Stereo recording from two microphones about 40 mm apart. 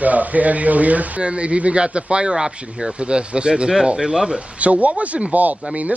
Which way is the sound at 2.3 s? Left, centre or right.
Centre.